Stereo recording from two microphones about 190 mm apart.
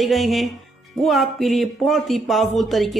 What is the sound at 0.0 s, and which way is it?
Speech, centre (ahead or behind).